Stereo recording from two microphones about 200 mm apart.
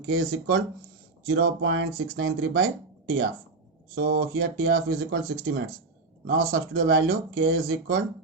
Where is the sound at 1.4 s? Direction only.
80° right.